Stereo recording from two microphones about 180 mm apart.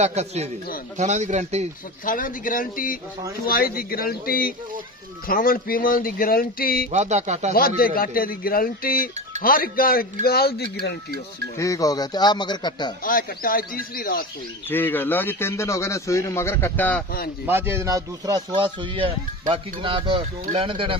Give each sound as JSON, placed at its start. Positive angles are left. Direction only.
{"t": 0.0, "sound": "speech", "side_deg": -35}
{"t": 2.0, "sound": "a man's voice", "side_deg": 50}
{"t": 6.9, "sound": "speech", "side_deg": -40}
{"t": 7.5, "sound": "a man's voice", "side_deg": 55}
{"t": 11.5, "sound": "speech", "side_deg": 20}
{"t": 13.0, "sound": "speech", "side_deg": 50}
{"t": 14.7, "sound": "a man's voice", "side_deg": 10}
{"t": 17.5, "sound": "speech", "side_deg": -15}